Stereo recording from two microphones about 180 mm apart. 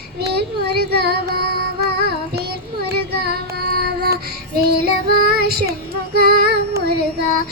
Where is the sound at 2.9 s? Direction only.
60° right (ahead or behind).